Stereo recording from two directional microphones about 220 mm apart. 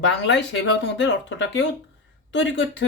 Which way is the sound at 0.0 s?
55° left (ahead or behind).